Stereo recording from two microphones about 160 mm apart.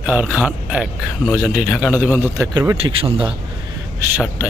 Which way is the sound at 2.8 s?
35° right (ahead or behind).